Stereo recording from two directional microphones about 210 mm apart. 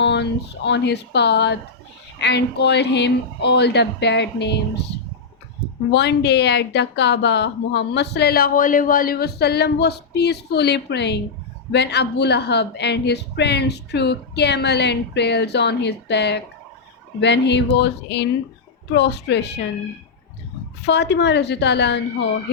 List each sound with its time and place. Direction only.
0.0 s a woman's voice: 55° left (ahead or behind)
20.8 s a woman's voice: 55° left (ahead or behind)